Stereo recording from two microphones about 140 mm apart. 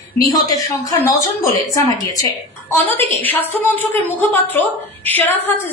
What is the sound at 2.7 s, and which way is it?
A woman's voice, 15° left (ahead or behind).